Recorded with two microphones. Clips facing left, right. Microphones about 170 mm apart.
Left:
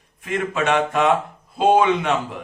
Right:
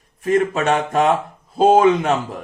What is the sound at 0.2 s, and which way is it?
Speech, 40° right (ahead or behind).